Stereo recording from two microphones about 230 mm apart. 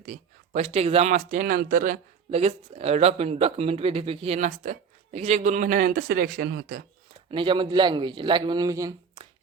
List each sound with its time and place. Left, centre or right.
0.0 s speech: right
7.3 s speech: right